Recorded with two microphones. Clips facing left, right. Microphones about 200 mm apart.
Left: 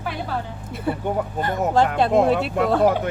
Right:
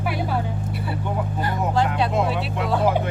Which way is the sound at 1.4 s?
50° left (ahead or behind).